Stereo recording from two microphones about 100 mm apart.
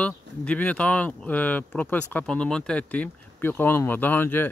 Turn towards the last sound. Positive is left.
turn(degrees=20)  # may be behind; listen again after turning